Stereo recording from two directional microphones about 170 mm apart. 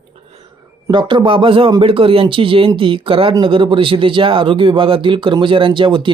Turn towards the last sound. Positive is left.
turn(degrees=-30)  # may be behind; listen again after turning